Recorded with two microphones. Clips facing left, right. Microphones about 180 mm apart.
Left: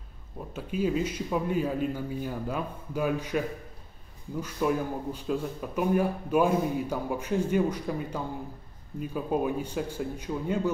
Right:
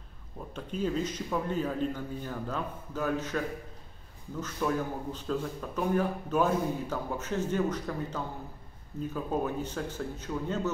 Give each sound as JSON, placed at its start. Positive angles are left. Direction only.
{"t": 0.5, "sound": "speech", "side_deg": 10}